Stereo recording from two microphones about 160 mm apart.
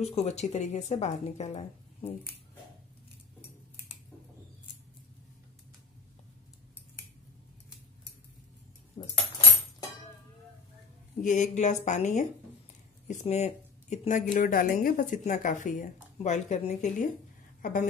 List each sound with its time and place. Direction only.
0.0 s speech: 40° left (ahead or behind)
9.0 s a sound: 35° left (ahead or behind)
11.1 s a woman's voice: 50° left (ahead or behind)